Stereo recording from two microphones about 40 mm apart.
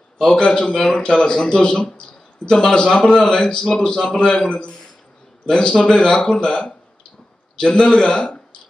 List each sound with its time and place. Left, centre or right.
0.2 s speech: centre